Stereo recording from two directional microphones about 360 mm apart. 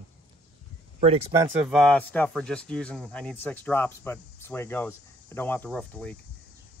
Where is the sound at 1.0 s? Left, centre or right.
Centre.